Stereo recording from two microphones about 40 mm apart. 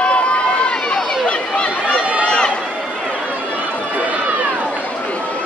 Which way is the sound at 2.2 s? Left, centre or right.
Left.